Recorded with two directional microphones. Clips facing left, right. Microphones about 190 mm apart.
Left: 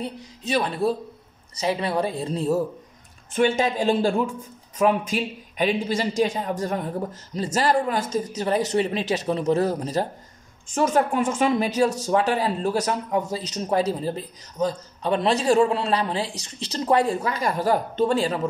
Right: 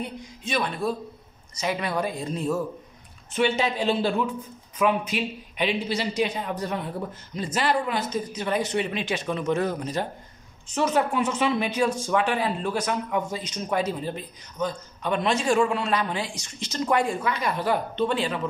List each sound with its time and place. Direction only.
0.0 s speech: 35° left (ahead or behind)
3.3 s speech: 45° left (ahead or behind)
10.7 s speech: 50° left (ahead or behind)